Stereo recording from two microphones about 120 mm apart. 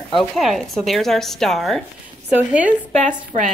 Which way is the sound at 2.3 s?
10° right (ahead or behind).